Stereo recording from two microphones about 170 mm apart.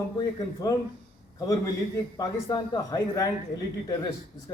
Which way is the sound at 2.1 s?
20° left (ahead or behind).